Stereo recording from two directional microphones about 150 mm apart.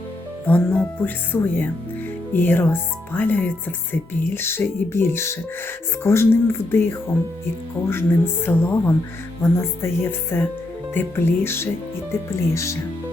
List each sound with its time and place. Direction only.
0.4 s speech: 10° left (ahead or behind)
7.9 s speech: 15° left (ahead or behind)